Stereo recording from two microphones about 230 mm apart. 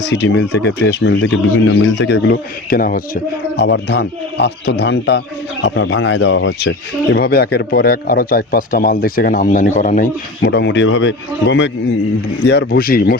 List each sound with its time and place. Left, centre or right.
0.0 s a man's voice: left